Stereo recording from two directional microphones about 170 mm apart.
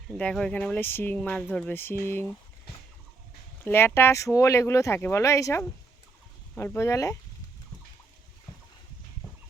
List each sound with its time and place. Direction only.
0.2 s speech: 5° left (ahead or behind)
3.6 s speech: 15° left (ahead or behind)